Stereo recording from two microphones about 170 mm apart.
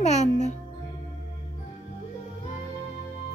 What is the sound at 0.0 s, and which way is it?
Music, 45° left (ahead or behind).